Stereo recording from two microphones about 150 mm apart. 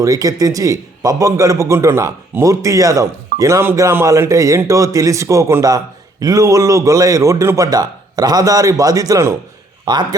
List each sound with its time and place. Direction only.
0.0 s a man's voice: 25° right (ahead or behind)